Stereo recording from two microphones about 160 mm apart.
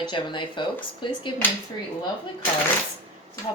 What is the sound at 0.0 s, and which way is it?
Speech, 30° left (ahead or behind).